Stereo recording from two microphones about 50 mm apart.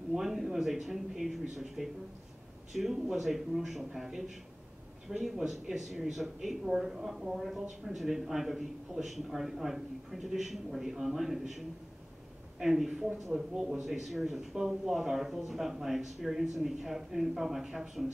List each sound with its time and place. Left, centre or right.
0.1 s a man's voice: centre